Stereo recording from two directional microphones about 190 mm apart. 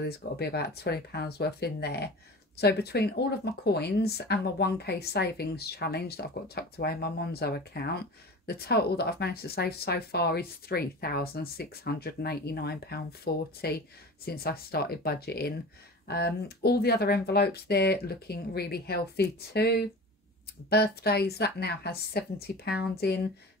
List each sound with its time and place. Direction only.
0.0 s speech: 60° left (ahead or behind)